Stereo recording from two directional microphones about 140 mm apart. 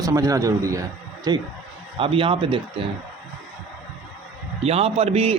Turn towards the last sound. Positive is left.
turn(degrees=-45)  # may be behind; listen again after turning